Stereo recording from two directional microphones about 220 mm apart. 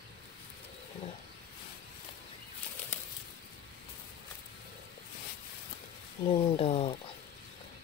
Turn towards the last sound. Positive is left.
turn(degrees=25)  # may be behind; listen again after turning